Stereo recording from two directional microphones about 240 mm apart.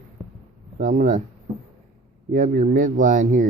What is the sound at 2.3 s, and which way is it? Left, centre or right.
Speech, right.